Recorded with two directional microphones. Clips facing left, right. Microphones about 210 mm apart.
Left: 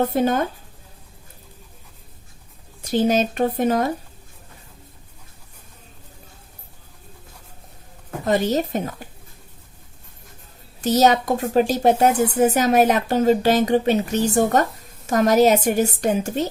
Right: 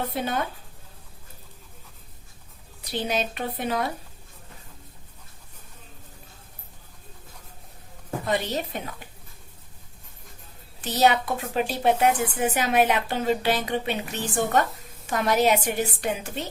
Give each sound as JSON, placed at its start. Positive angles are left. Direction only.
{"t": 0.0, "sound": "speech", "side_deg": 45}
{"t": 2.8, "sound": "speech", "side_deg": 45}
{"t": 8.2, "sound": "speech", "side_deg": 45}
{"t": 10.8, "sound": "a woman's voice", "side_deg": 40}